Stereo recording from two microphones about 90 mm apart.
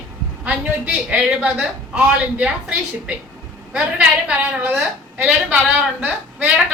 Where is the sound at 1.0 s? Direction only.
10° right (ahead or behind).